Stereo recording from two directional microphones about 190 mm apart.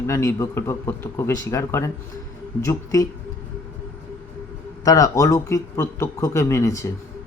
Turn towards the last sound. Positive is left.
turn(degrees=15)  # may be behind; listen again after turning